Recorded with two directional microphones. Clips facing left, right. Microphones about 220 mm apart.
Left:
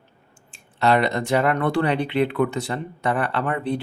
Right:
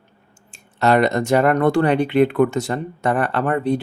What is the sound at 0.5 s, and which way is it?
Speech, 45° right (ahead or behind).